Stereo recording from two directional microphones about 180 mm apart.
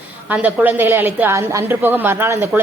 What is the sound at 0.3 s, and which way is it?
A woman's voice, 10° right (ahead or behind).